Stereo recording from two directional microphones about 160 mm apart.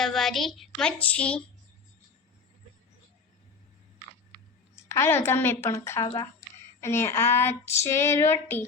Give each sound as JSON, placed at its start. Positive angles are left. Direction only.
{"t": 0.0, "sound": "speech", "side_deg": 0}
{"t": 4.7, "sound": "a woman's voice", "side_deg": 15}
{"t": 5.6, "sound": "child singing", "side_deg": 15}